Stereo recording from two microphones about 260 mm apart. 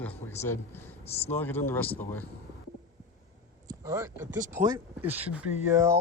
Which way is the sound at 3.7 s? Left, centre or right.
Centre.